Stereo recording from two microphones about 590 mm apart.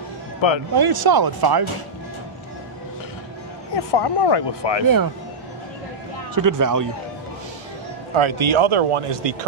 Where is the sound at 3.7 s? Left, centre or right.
Left.